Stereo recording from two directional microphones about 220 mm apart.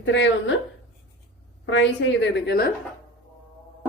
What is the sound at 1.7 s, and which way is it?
Speech, 55° left (ahead or behind).